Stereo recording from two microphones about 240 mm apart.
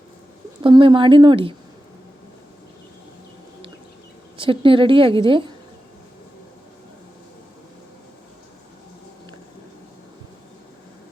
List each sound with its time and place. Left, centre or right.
0.6 s a woman's voice: centre
4.4 s a woman's voice: right